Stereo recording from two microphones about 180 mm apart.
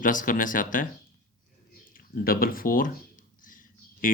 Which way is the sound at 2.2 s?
55° left (ahead or behind).